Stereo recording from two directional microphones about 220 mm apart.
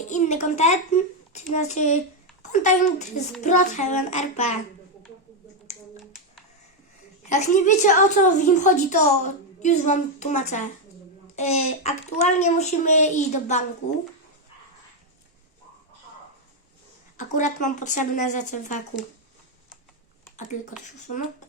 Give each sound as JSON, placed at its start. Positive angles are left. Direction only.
{"t": 0.1, "sound": "a woman's voice", "side_deg": 30}
{"t": 7.3, "sound": "a woman's voice", "side_deg": 35}
{"t": 17.2, "sound": "a woman's voice", "side_deg": 35}
{"t": 20.5, "sound": "a woman's voice", "side_deg": 35}